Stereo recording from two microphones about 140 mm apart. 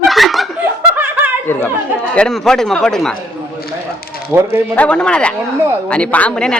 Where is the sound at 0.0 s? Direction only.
Centre (ahead or behind).